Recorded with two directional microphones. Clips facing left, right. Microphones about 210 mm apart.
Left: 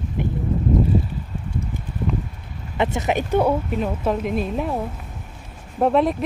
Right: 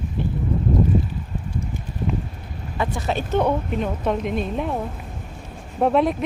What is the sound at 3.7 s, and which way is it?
A woman's voice, 5° left (ahead or behind).